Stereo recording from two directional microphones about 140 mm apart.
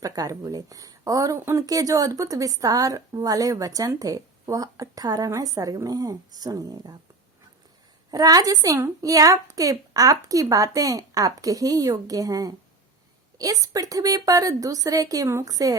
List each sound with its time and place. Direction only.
0.0 s speech: 25° right (ahead or behind)
8.1 s speech: 25° right (ahead or behind)